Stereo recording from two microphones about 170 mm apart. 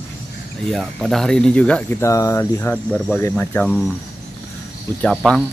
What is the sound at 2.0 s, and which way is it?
Speech, 20° left (ahead or behind).